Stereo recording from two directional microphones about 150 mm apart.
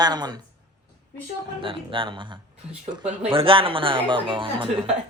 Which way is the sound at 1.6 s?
35° right (ahead or behind).